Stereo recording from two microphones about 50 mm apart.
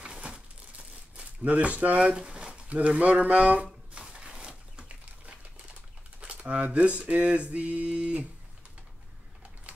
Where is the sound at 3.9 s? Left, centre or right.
Centre.